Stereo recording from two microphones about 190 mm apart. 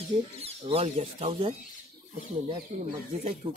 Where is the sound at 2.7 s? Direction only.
35° right (ahead or behind).